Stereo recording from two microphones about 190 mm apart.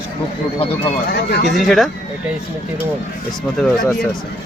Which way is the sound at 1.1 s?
60° left (ahead or behind).